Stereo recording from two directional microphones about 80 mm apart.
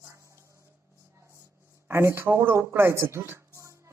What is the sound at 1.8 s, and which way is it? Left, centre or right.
Speech, right.